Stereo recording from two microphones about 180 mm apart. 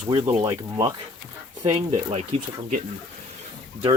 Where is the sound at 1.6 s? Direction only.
35° right (ahead or behind).